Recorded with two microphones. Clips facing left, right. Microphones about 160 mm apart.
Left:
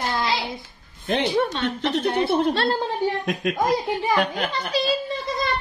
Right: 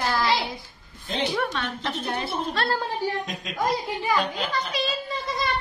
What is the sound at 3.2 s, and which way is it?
A man's voice, 60° left (ahead or behind).